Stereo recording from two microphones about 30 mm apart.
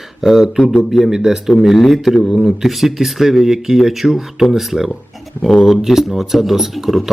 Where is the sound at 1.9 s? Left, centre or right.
Centre.